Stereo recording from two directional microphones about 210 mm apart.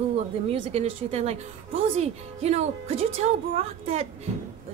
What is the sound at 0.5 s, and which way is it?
Speech, 30° right (ahead or behind).